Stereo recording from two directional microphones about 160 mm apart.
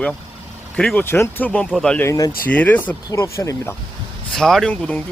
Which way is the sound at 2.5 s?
10° left (ahead or behind).